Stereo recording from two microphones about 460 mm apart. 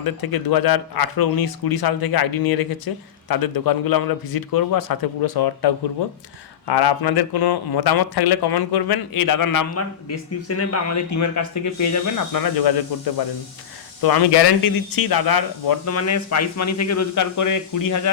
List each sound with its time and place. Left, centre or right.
0.0 s speech: left
14.6 s speech: left
15.9 s a man's voice: left